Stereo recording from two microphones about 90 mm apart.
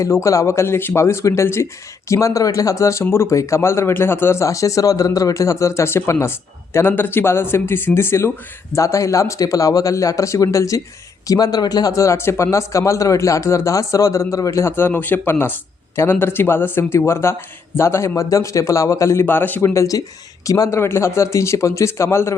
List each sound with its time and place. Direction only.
0.0 s speech: 35° left (ahead or behind)
14.8 s speech: 25° left (ahead or behind)